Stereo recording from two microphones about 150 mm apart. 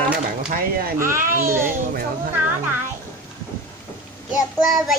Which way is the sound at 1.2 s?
65° right (ahead or behind).